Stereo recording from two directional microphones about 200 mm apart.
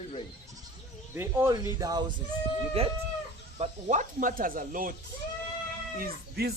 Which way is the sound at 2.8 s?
30° right (ahead or behind).